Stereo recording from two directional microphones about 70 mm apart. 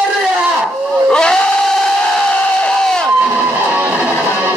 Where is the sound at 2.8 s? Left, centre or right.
Centre.